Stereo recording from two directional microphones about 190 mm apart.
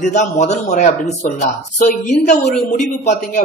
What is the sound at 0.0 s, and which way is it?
A woman's voice, 40° left (ahead or behind).